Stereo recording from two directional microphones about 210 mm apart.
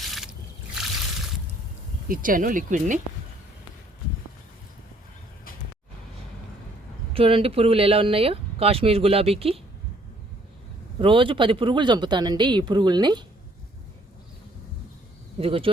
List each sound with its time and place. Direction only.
0.0 s a sound: centre (ahead or behind)
2.0 s speech: 40° right (ahead or behind)
7.1 s speech: 25° right (ahead or behind)
11.0 s speech: 25° right (ahead or behind)
15.4 s speech: 25° right (ahead or behind)